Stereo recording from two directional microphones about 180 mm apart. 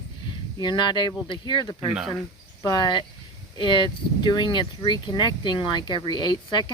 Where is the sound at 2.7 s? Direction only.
25° left (ahead or behind).